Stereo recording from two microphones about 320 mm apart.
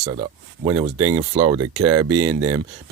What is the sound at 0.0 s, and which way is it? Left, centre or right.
Speech, centre.